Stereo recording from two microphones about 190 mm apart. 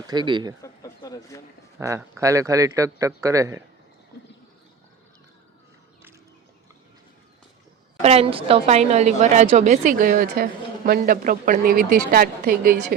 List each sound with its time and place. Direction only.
0.1 s speech: 25° right (ahead or behind)
0.6 s a sound: 20° left (ahead or behind)
1.8 s speech: 15° right (ahead or behind)
8.0 s a woman's voice: 30° right (ahead or behind); by 12.7 s 55° right (ahead or behind)